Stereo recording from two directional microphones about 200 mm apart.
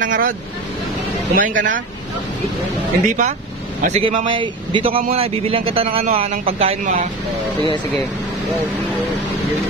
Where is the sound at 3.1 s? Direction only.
40° right (ahead or behind).